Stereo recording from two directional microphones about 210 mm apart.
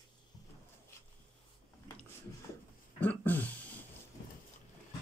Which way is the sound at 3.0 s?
5° left (ahead or behind).